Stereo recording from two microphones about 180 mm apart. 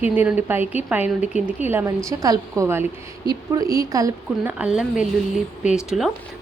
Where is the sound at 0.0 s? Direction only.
10° right (ahead or behind).